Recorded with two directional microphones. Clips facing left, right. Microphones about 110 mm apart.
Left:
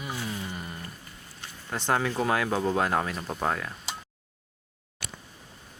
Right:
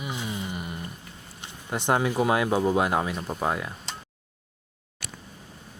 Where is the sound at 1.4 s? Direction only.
15° right (ahead or behind).